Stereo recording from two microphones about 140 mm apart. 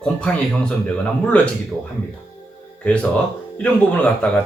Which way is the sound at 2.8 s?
10° left (ahead or behind).